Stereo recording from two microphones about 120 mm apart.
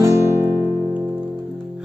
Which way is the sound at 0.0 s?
20° right (ahead or behind).